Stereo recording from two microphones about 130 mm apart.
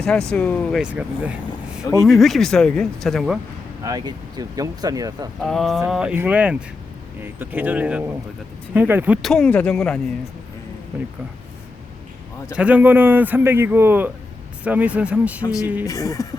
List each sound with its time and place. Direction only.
0.0 s speech: 5° left (ahead or behind)
0.8 s speech: 10° right (ahead or behind)
1.8 s speech: 25° left (ahead or behind)
2.0 s speech: centre (ahead or behind)
3.8 s speech: 30° right (ahead or behind)
5.4 s speech: centre (ahead or behind); by 9.1 s 15° right (ahead or behind)
9.2 s speech: 5° left (ahead or behind)
12.5 s speech: 10° right (ahead or behind)
15.9 s speech: 25° left (ahead or behind)